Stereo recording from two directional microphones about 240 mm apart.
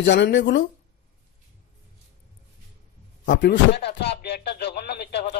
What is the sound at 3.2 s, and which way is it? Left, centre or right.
Speech, left.